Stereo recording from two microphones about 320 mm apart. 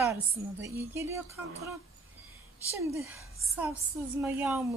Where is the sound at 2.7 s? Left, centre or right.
Centre.